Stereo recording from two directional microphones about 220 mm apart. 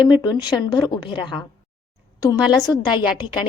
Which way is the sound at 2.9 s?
5° right (ahead or behind).